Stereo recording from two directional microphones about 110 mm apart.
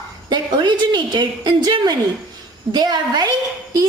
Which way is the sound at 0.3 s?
40° right (ahead or behind).